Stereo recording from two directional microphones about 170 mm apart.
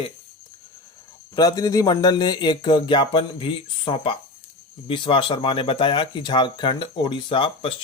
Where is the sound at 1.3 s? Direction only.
20° left (ahead or behind).